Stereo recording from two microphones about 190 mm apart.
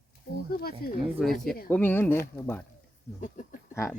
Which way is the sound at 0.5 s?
55° left (ahead or behind).